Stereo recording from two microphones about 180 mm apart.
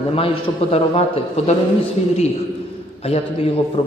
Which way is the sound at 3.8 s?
35° left (ahead or behind).